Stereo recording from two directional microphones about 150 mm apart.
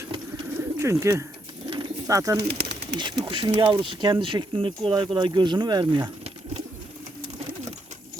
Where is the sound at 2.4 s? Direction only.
90° right.